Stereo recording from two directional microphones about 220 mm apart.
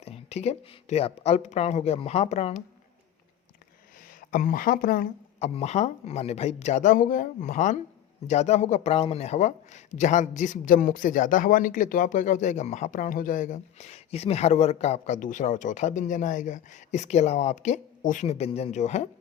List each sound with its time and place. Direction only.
0.0 s speech: 30° left (ahead or behind)
4.2 s a man's voice: 35° left (ahead or behind)